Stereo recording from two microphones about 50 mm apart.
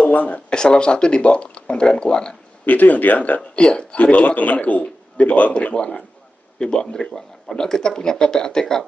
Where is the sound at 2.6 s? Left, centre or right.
Left.